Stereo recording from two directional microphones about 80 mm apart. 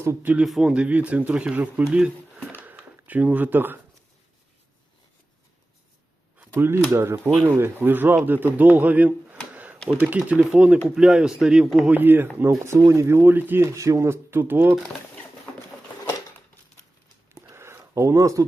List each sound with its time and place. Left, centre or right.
0.0 s speech: right
0.4 s a man's voice: centre
0.7 s speech: centre
1.9 s a sound: centre
6.6 s speech: right; by 11.6 s centre
11.9 s speech: right
13.7 s speech: right
17.3 s a sound: right